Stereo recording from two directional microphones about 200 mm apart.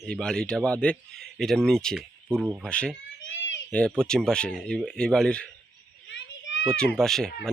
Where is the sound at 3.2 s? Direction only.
70° left (ahead or behind).